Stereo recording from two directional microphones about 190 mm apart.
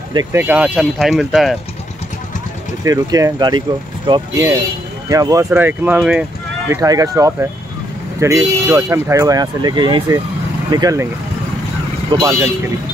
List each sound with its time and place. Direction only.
0.1 s speech: 15° right (ahead or behind); by 1.6 s centre (ahead or behind)
2.8 s speech: 20° right (ahead or behind)
6.7 s speech: 20° right (ahead or behind)
12.1 s speech: 25° right (ahead or behind)